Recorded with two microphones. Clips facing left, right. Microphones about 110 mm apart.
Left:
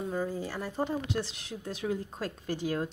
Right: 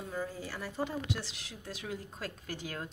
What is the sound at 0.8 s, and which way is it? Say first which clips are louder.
Speech: left 4 dB; 45° left (ahead or behind).